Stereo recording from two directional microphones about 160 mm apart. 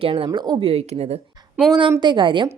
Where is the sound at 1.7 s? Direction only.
30° right (ahead or behind).